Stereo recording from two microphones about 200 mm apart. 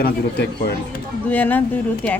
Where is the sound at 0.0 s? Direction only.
50° left (ahead or behind).